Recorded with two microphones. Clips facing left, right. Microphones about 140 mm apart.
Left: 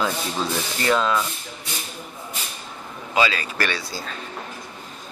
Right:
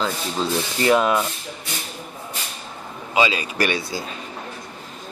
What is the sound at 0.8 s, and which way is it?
Speech, 20° right (ahead or behind).